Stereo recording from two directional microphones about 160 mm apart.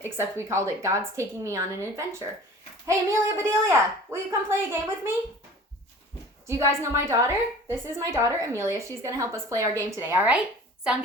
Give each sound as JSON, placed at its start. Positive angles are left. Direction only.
{"t": 0.0, "sound": "a woman's voice", "side_deg": -15}
{"t": 6.5, "sound": "a woman's voice", "side_deg": -15}